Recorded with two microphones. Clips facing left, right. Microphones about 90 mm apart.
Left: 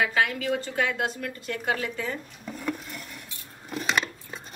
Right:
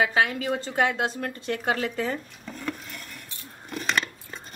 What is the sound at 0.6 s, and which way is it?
Speech, 30° right (ahead or behind).